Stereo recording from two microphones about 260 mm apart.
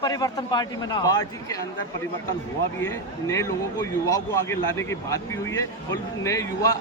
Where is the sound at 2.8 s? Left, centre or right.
Centre.